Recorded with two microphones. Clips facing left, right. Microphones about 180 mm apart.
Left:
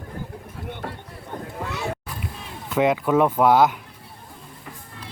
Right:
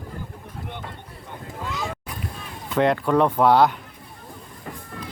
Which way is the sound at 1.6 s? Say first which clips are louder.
Left 1 dB; 65° left (ahead or behind).